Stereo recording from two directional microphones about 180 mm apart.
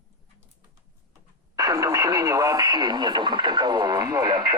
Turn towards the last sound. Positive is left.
turn(degrees=-25)  # may be behind; listen again after turning